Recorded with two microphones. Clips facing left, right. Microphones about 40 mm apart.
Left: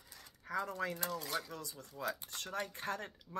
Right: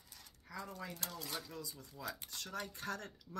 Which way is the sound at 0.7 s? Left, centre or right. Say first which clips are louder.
Left 8 dB; left.